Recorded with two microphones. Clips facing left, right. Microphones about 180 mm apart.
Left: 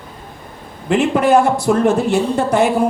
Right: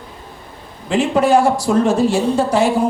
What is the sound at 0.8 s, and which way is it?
Speech, 60° left (ahead or behind).